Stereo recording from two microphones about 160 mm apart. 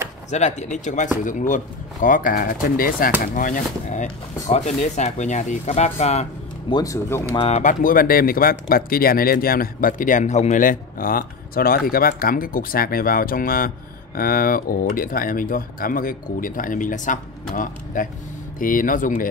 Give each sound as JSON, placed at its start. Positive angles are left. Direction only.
{"t": 0.3, "sound": "speech", "side_deg": 45}
{"t": 6.7, "sound": "speech", "side_deg": 20}
{"t": 7.3, "sound": "speech", "side_deg": 45}